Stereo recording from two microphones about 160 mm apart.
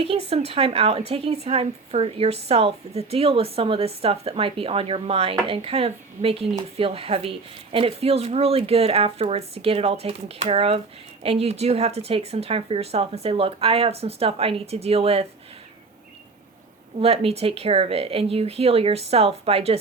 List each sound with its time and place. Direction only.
0.0 s a woman's voice: 40° right (ahead or behind)
17.0 s a woman's voice: 40° right (ahead or behind)